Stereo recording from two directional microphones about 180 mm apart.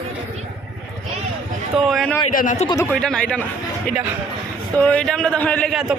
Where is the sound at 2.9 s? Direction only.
5° left (ahead or behind).